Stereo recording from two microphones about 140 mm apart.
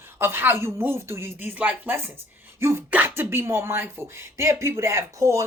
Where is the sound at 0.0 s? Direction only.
15° right (ahead or behind).